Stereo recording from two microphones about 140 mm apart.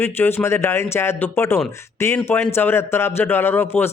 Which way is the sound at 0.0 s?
15° left (ahead or behind).